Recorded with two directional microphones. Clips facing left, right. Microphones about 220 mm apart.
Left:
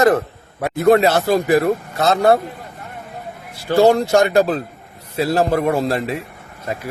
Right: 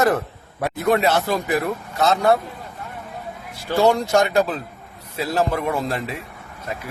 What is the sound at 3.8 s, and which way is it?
Speech, 40° left (ahead or behind).